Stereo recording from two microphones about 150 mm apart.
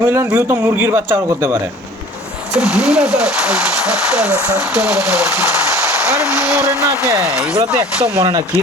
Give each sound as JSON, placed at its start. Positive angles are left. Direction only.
{"t": 0.0, "sound": "a sound", "side_deg": -20}
{"t": 0.3, "sound": "speech", "side_deg": -15}
{"t": 2.6, "sound": "speech", "side_deg": -5}
{"t": 6.1, "sound": "speech", "side_deg": 20}
{"t": 8.2, "sound": "speech", "side_deg": -30}